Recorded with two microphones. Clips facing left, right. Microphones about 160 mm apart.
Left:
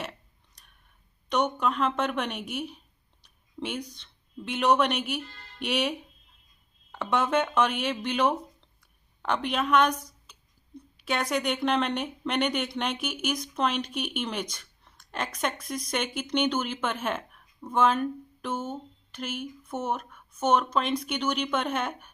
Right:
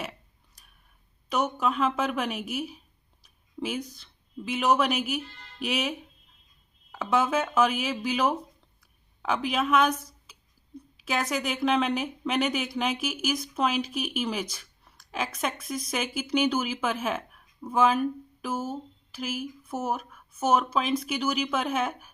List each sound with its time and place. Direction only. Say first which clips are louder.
1.3 s a woman's voice: left 1 dB; 5° right (ahead or behind)